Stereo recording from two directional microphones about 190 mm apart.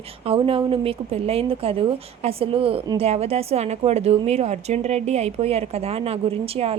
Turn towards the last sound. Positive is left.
turn(degrees=-30)  # may be behind; listen again after turning